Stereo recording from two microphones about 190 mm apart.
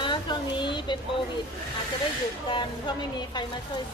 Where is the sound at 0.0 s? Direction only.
25° left (ahead or behind).